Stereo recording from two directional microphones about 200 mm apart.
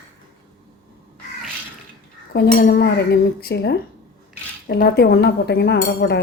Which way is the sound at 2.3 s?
55° left (ahead or behind).